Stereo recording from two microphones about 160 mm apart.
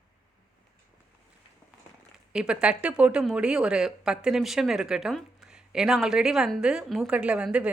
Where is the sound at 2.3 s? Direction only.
5° right (ahead or behind).